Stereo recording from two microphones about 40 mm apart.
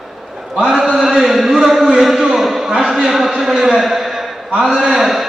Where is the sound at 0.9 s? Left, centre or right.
Centre.